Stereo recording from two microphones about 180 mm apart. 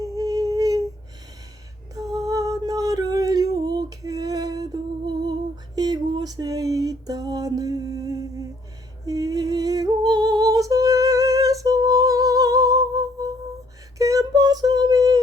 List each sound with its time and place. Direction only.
0.0 s humming: 20° right (ahead or behind)
2.0 s music: 20° right (ahead or behind)
5.7 s a sound: 20° right (ahead or behind)